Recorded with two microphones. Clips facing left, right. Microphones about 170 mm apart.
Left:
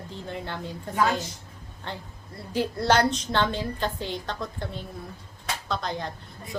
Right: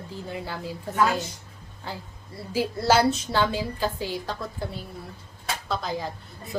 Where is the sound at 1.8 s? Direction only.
5° right (ahead or behind).